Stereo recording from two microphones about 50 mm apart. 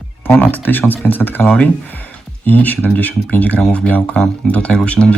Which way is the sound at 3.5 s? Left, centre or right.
Centre.